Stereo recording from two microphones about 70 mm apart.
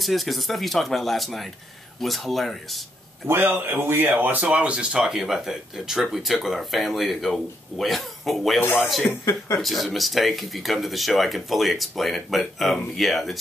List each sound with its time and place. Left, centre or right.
0.0 s speech: centre
3.3 s speech: right; by 8.5 s centre
9.2 s speech: left
9.6 s speech: centre